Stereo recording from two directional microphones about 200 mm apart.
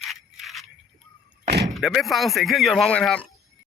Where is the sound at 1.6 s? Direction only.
Centre (ahead or behind).